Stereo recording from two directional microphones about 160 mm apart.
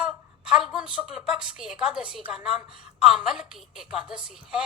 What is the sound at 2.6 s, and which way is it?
Speech, 30° right (ahead or behind).